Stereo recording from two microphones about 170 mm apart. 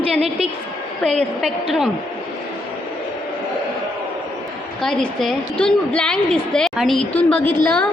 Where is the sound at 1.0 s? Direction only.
Centre (ahead or behind).